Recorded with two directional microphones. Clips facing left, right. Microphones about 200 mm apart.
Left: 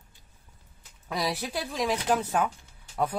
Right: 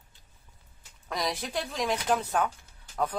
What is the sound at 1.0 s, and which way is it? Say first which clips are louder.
Speech: left 2 dB; 5° left (ahead or behind).